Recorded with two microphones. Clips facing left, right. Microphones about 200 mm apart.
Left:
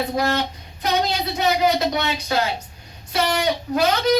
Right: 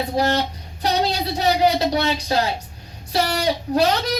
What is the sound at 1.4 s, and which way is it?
Child singing, 30° right (ahead or behind).